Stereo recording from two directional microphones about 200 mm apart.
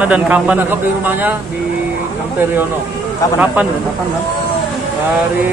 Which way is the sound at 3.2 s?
15° left (ahead or behind).